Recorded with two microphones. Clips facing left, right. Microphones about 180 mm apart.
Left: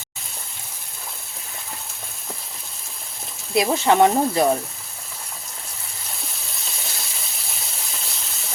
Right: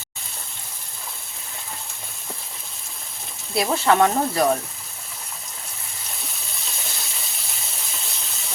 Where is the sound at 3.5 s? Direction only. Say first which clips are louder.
Left 2 dB; 20° left (ahead or behind).